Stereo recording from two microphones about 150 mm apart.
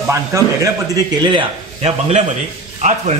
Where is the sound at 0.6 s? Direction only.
25° right (ahead or behind); by 3.1 s 50° right (ahead or behind).